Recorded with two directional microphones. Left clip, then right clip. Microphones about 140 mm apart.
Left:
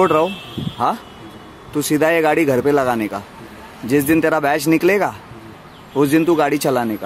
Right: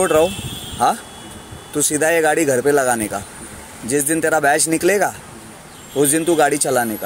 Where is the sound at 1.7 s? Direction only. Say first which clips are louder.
Left 1 dB; 15° left (ahead or behind).